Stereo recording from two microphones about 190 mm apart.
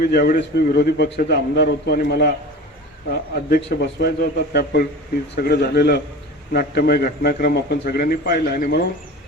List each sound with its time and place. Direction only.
0.0 s a man's voice: 50° left (ahead or behind)